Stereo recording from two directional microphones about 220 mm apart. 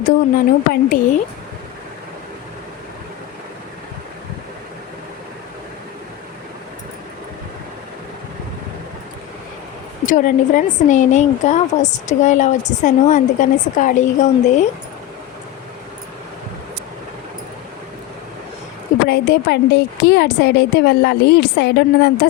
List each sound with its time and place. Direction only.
0.0 s speech: 40° left (ahead or behind)
10.1 s speech: 35° left (ahead or behind)
19.0 s a woman's voice: 45° left (ahead or behind)